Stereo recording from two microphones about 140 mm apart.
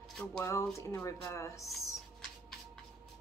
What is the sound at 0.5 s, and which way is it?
A woman's voice, 20° left (ahead or behind).